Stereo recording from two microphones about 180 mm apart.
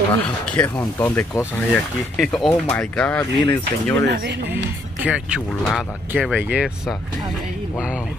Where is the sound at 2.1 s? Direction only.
Centre (ahead or behind).